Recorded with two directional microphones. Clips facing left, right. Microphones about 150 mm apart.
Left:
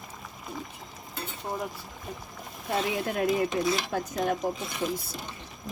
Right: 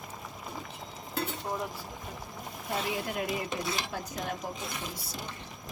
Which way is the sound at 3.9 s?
50° left (ahead or behind).